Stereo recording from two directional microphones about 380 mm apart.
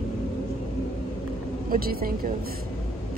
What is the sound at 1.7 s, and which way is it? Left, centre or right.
Speech, right.